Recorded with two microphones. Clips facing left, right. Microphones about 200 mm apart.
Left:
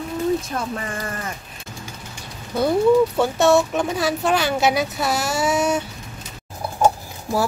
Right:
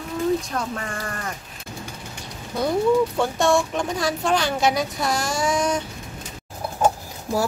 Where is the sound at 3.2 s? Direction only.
5° left (ahead or behind).